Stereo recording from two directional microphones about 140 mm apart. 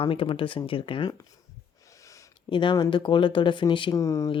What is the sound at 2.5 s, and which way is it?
Speech, 35° left (ahead or behind).